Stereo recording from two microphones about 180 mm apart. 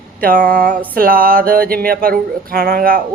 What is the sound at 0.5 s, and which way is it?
Speech, 50° right (ahead or behind).